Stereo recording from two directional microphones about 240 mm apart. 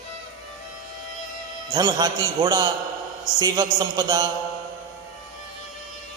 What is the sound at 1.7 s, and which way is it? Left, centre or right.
A woman's voice, centre.